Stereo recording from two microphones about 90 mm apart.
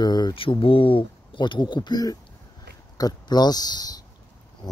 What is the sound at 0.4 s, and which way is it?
Speech, 85° left.